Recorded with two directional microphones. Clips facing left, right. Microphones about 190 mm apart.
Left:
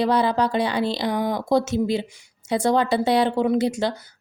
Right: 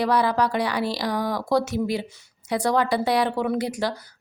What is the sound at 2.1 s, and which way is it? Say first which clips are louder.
Speech: right 3 dB; 15° left (ahead or behind).